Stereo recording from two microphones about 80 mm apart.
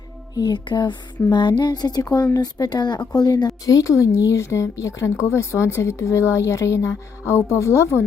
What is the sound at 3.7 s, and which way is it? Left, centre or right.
A woman's voice, left.